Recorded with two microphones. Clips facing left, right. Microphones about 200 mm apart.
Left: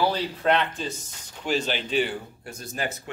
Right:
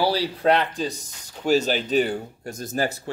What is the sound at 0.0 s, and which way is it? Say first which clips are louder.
Speech: right 3 dB; 35° right (ahead or behind).